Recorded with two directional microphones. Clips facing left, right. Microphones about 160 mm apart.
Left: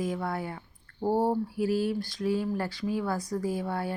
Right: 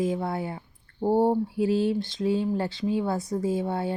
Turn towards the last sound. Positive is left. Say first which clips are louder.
# right 4 dB
turn(degrees=-25)  # may be behind; listen again after turning